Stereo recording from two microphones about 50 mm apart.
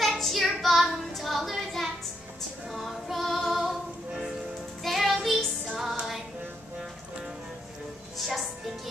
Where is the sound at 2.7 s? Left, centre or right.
Centre.